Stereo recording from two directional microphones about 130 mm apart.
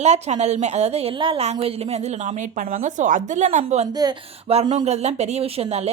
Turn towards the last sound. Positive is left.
turn(degrees=-55)  # may be behind; listen again after turning